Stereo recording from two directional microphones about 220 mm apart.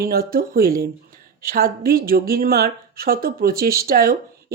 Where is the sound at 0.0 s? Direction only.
45° right (ahead or behind).